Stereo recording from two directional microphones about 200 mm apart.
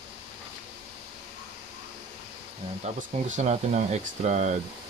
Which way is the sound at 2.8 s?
35° right (ahead or behind).